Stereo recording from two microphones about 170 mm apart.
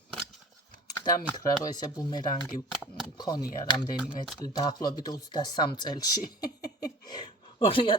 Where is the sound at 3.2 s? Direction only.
25° left (ahead or behind).